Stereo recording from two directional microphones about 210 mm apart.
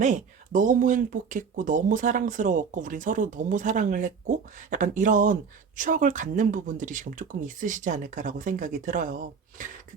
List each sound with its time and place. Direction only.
0.0 s speech: 35° right (ahead or behind)